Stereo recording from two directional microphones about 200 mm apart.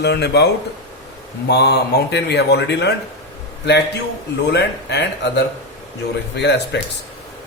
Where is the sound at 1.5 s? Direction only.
55° left (ahead or behind).